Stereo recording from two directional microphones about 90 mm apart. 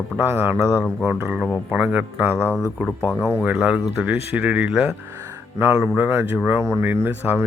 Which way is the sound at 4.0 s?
20° right (ahead or behind).